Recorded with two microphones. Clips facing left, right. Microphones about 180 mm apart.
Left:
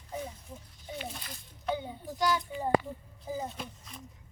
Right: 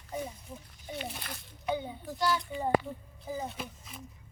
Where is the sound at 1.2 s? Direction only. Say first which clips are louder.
Right 4 dB; 70° right (ahead or behind).